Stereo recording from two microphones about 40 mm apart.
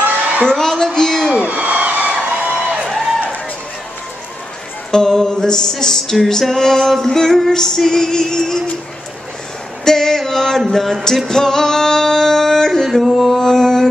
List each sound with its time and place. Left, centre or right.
0.0 s a sound: right
0.5 s music: centre
0.9 s a sound: centre
1.5 s music: right
4.9 s music: centre
9.8 s female singing: centre
10.7 s music: centre
12.8 s a sound: centre
13.4 s music: centre